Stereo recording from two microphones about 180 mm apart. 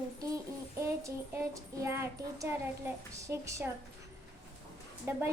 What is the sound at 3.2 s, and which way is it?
Child singing, 15° right (ahead or behind).